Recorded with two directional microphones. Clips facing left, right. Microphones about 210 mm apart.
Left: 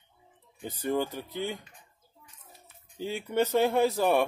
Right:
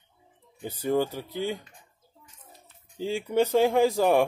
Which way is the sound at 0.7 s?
10° right (ahead or behind).